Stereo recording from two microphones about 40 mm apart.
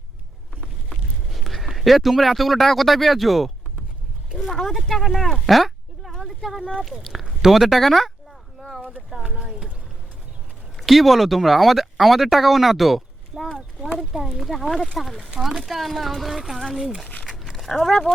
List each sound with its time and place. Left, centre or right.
0.9 s speech: centre
4.6 s speech: centre
5.1 s a sound: centre
7.5 s speech: centre
9.2 s speech: right
10.8 s speech: centre
13.9 s speech: centre
17.7 s speech: centre